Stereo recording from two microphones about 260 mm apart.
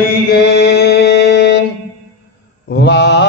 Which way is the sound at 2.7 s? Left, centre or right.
Left.